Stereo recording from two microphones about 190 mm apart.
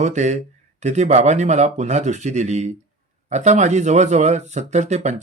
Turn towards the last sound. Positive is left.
turn(degrees=-40)  # may be behind; listen again after turning